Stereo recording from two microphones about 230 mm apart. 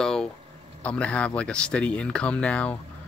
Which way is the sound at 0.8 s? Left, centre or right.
Centre.